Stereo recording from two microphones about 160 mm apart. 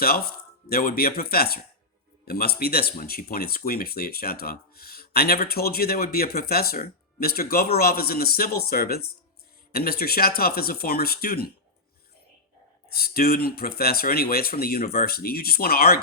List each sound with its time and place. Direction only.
0.0 s speech: 70° left (ahead or behind)
12.9 s speech: 70° left (ahead or behind)